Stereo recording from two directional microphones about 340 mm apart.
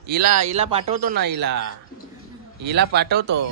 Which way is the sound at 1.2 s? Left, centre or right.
Right.